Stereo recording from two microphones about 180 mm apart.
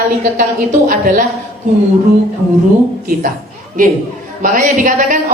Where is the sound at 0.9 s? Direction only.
50° right (ahead or behind).